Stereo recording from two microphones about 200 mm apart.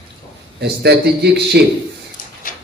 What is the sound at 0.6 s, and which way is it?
Speech, 55° right (ahead or behind).